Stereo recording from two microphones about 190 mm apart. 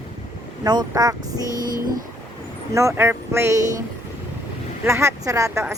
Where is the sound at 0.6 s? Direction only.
20° right (ahead or behind).